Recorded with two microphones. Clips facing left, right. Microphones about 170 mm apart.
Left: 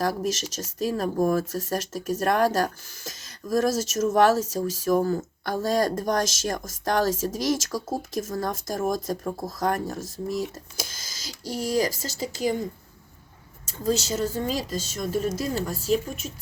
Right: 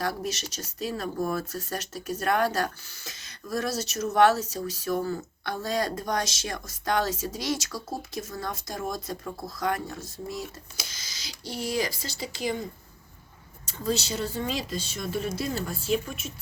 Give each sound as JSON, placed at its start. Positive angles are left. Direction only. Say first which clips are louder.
{"t": 0.0, "sound": "speech", "louder": "left 5 dB", "side_deg": 40}
{"t": 13.7, "sound": "speech", "louder": "left 3 dB", "side_deg": 45}